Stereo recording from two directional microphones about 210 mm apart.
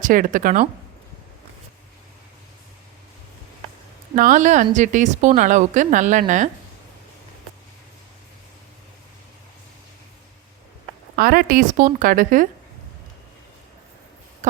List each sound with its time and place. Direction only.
0.0 s speech: 40° right (ahead or behind)
4.1 s speech: 40° right (ahead or behind)
11.2 s speech: 45° right (ahead or behind)